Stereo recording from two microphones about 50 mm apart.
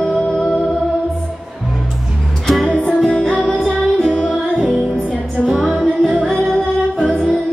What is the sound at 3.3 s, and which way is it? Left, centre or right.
Music, right.